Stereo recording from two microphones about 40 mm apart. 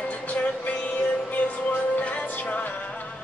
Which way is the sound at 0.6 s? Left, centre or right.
Left.